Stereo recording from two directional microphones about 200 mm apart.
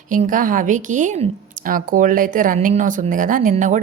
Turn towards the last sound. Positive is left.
turn(degrees=-40)  # may be behind; listen again after turning